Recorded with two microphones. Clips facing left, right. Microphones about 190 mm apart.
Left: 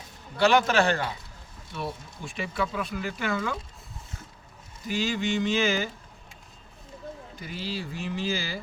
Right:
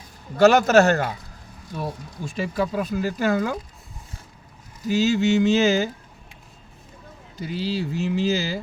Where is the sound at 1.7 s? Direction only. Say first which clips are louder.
Right 4 dB; 40° right (ahead or behind).